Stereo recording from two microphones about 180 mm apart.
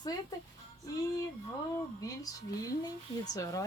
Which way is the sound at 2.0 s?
20° left (ahead or behind).